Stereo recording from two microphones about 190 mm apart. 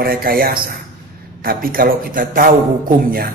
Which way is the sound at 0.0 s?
50° right (ahead or behind).